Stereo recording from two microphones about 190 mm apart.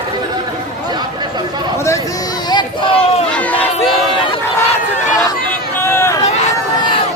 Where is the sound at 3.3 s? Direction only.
10° left (ahead or behind).